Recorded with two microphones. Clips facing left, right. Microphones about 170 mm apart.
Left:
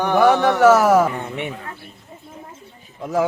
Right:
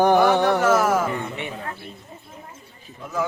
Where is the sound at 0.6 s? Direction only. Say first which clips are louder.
Left 6 dB; 80° left.